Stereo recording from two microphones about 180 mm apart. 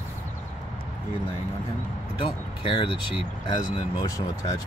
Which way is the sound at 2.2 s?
30° left (ahead or behind).